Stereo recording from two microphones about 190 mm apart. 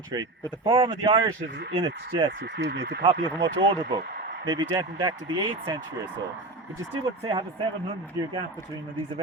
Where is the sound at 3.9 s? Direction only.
55° right (ahead or behind).